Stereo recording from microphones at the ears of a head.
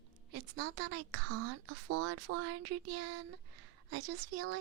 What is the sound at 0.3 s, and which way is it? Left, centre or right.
A woman's voice, right.